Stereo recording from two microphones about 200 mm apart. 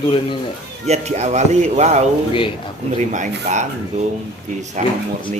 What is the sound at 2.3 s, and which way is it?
Speech, 25° left (ahead or behind).